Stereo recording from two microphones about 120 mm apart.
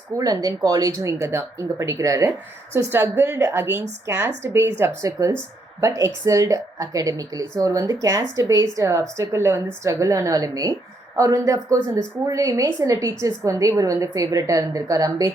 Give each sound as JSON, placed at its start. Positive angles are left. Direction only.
{"t": 0.2, "sound": "a woman's voice", "side_deg": -30}